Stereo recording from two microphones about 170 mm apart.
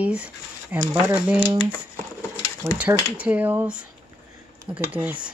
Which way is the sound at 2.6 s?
10° right (ahead or behind).